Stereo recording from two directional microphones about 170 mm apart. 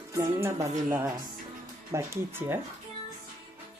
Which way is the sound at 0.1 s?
15° right (ahead or behind).